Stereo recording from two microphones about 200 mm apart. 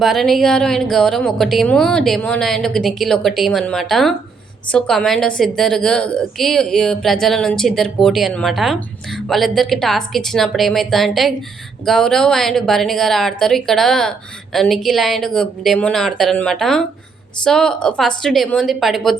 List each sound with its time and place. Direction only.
0.0 s a woman's voice: centre (ahead or behind)